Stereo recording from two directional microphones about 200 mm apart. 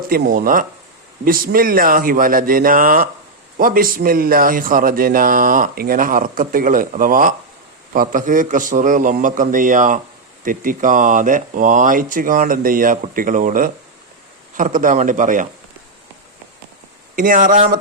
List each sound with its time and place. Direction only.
0.1 s a man's voice: 45° right (ahead or behind)
17.2 s a man's voice: 45° right (ahead or behind)